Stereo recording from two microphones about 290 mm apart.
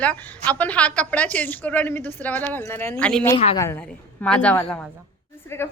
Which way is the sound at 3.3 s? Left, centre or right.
Centre.